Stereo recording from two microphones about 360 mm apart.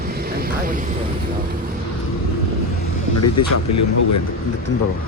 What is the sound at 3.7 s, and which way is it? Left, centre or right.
Speech, left.